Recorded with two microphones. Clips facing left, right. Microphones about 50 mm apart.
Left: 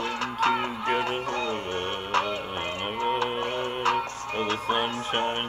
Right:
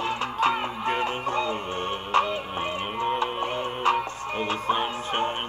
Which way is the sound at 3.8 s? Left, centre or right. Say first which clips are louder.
Right 2 dB; right.